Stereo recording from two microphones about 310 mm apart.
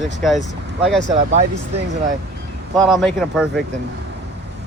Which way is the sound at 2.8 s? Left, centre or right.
Centre.